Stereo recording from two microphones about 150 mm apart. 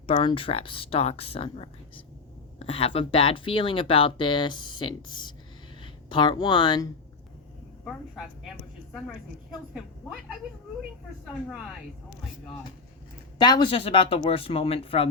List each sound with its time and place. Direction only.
0.1 s speech: 35° left (ahead or behind)
8.9 s a woman's voice: 5° left (ahead or behind)
13.4 s speech: 30° left (ahead or behind)